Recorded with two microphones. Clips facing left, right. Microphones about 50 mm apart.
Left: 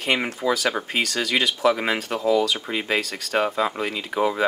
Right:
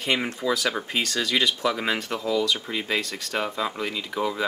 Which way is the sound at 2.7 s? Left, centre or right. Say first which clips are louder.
Left 3 dB; centre.